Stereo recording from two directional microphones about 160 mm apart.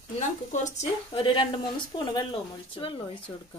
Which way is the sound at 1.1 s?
30° left (ahead or behind).